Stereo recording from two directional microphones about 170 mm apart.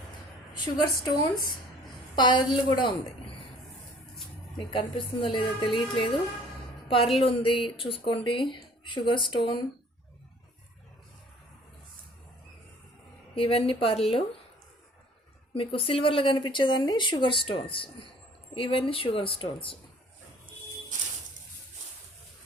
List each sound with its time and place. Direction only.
0.5 s speech: 25° left (ahead or behind)
2.1 s speech: 25° left (ahead or behind)
4.7 s a woman's voice: 30° left (ahead or behind)
7.2 s speech: 30° left (ahead or behind)
13.3 s a woman's voice: 35° left (ahead or behind)
15.5 s a woman's voice: 30° left (ahead or behind)